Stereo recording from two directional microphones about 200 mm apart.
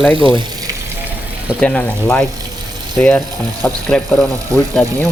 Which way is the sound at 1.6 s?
10° left (ahead or behind).